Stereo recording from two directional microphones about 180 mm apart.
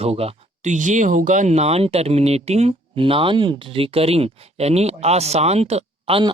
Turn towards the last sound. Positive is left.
turn(degrees=-30)  # may be behind; listen again after turning